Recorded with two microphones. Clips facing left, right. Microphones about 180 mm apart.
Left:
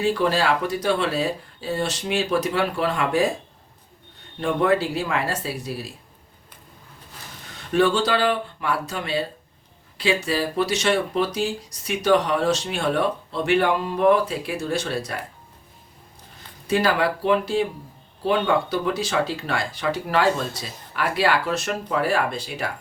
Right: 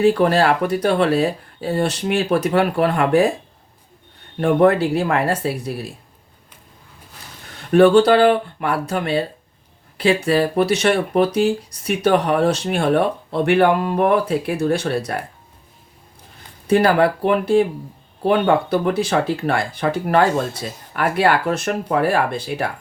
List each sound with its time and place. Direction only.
0.0 s speech: 60° right (ahead or behind)
4.4 s speech: 60° right (ahead or behind)
7.7 s speech: 60° right (ahead or behind)
16.6 s speech: 55° right (ahead or behind)